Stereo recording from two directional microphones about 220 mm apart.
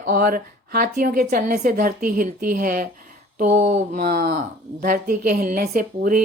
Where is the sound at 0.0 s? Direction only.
40° right (ahead or behind).